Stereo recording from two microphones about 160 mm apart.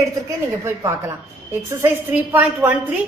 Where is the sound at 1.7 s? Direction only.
15° right (ahead or behind).